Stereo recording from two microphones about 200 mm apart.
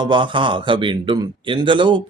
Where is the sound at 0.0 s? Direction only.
25° right (ahead or behind).